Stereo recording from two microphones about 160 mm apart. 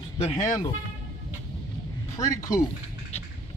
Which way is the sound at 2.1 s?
20° left (ahead or behind).